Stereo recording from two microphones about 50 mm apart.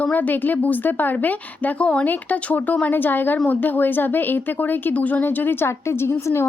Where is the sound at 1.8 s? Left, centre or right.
Left.